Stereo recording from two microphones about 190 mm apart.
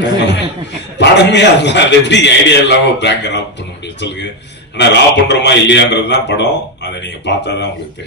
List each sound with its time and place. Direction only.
0.9 s a man's voice: 65° left (ahead or behind)